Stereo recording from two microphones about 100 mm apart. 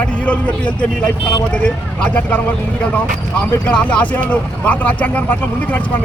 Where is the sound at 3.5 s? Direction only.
15° left (ahead or behind).